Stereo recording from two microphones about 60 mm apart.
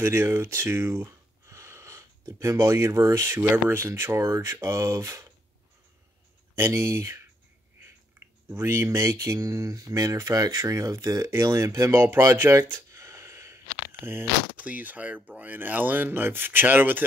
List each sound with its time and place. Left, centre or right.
0.0 s speech: right
1.5 s sniff: right
2.2 s speech: right
3.3 s speech: right
6.5 s speech: right
8.6 s speech: right
9.4 s mantra: right
10.7 s speech: right
11.9 s speech: right
12.9 s a sound: right
14.6 s speech: right